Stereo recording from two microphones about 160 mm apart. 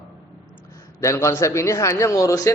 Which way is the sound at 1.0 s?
15° left (ahead or behind).